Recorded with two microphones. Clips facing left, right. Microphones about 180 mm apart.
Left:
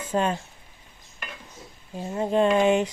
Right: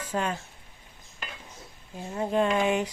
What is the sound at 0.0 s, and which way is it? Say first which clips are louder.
Speech: left 5 dB; 25° left (ahead or behind).